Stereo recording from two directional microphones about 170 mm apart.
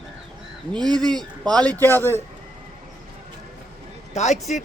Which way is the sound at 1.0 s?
5° left (ahead or behind).